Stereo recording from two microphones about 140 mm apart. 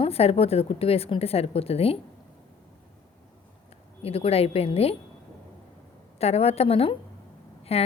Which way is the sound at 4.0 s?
45° left (ahead or behind).